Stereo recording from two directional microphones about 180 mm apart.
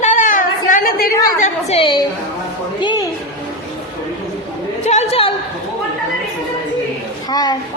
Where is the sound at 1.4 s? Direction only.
35° left (ahead or behind).